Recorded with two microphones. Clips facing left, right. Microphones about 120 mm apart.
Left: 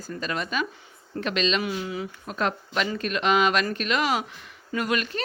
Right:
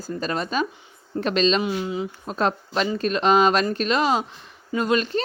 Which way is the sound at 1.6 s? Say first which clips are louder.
Right 4 dB; 25° right (ahead or behind).